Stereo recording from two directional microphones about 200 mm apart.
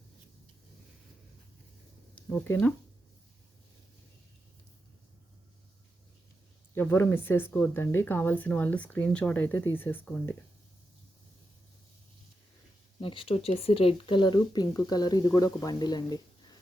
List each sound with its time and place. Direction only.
2.1 s speech: 10° left (ahead or behind)
6.7 s speech: 10° left (ahead or behind)
13.0 s speech: 25° left (ahead or behind)